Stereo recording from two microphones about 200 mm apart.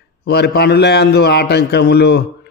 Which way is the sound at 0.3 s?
55° left (ahead or behind).